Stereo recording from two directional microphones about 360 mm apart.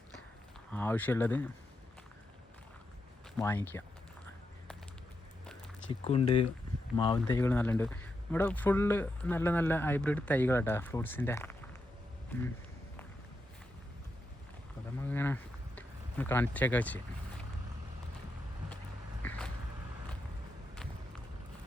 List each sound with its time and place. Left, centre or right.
0.7 s speech: centre
3.3 s speech: centre
5.9 s speech: centre
15.0 s speech: centre
19.2 s a sound: centre